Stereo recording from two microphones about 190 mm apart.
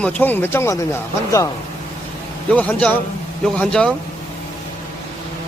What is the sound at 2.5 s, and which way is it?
A man's voice, 5° left (ahead or behind).